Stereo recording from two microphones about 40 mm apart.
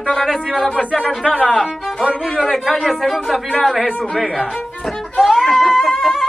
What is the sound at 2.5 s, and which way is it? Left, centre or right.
Speech, centre.